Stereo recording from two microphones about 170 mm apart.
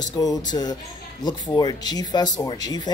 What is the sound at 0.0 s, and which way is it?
Speech, 20° left (ahead or behind).